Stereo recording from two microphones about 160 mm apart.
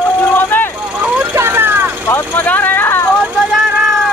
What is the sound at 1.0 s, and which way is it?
Vehicle, 15° right (ahead or behind).